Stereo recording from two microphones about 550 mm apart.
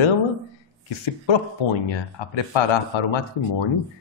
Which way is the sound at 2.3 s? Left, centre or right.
Left.